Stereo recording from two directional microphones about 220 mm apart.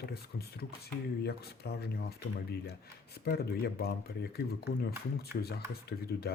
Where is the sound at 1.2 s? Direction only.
45° left (ahead or behind).